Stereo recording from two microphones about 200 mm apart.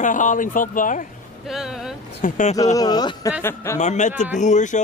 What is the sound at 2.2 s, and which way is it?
Speech, 40° left (ahead or behind).